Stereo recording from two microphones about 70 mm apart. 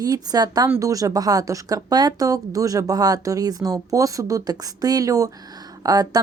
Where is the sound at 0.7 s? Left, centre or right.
Right.